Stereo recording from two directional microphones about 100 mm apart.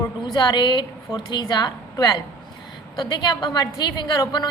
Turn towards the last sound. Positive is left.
turn(degrees=45)  # may be behind; listen again after turning